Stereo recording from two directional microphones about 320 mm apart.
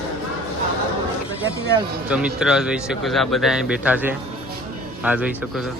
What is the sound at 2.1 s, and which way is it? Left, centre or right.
Speech, centre.